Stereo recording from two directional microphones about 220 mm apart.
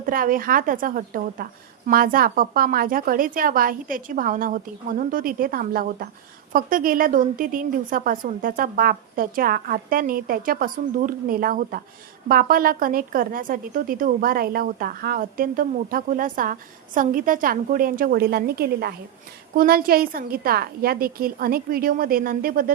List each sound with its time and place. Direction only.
0.0 s a woman's voice: 40° right (ahead or behind)